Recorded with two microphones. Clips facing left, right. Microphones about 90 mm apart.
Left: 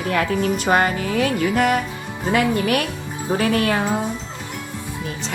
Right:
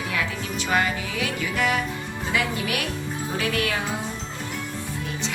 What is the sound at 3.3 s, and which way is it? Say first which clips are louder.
Speech: left 7 dB; 40° left (ahead or behind).